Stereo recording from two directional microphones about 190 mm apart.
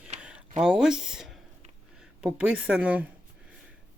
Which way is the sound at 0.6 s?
5° right (ahead or behind).